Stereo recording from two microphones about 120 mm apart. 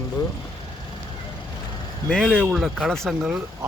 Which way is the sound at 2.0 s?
Centre (ahead or behind).